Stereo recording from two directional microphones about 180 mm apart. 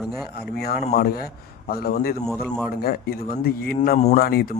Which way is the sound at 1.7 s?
60° left (ahead or behind).